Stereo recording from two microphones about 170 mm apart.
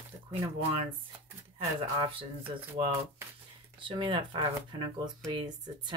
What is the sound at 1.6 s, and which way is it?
Speech, 30° right (ahead or behind).